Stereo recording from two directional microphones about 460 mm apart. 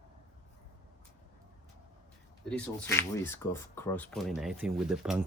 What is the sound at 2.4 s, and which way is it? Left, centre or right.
Speech, centre.